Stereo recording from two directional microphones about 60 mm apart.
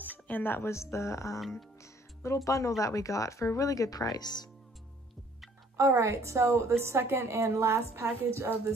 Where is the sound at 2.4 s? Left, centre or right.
Left.